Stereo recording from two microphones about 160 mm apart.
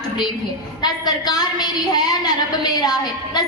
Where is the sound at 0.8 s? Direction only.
25° left (ahead or behind).